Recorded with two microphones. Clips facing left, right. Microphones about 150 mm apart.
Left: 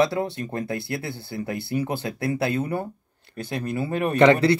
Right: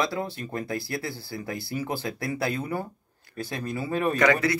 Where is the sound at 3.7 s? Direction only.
25° left (ahead or behind).